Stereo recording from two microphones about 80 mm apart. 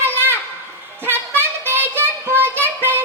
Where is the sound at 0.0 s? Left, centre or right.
Right.